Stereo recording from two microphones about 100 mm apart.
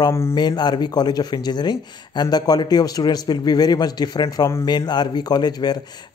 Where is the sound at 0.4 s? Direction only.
45° left (ahead or behind).